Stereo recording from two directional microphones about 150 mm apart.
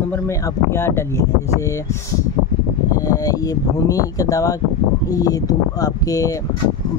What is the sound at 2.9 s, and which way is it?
Speech, 25° left (ahead or behind).